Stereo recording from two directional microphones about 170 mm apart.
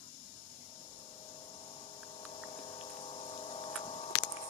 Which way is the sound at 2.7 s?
35° left (ahead or behind).